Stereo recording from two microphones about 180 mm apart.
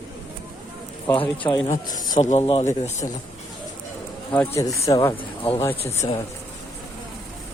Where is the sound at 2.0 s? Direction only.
45° left (ahead or behind).